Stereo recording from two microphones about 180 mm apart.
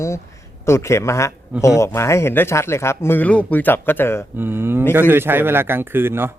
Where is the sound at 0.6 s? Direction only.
15° left (ahead or behind).